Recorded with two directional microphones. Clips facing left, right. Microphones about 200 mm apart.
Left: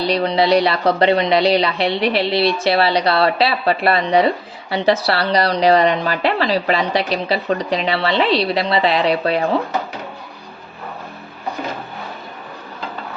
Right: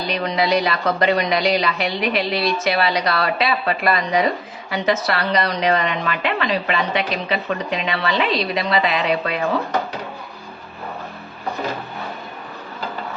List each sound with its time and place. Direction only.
0.0 s a woman's voice: 30° left (ahead or behind)